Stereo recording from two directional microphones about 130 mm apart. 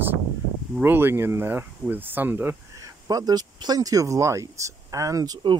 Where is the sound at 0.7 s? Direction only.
15° right (ahead or behind).